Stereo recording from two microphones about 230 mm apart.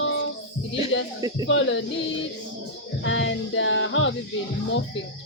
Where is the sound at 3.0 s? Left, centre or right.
Left.